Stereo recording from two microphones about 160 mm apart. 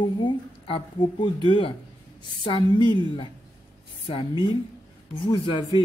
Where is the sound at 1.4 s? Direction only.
30° left (ahead or behind).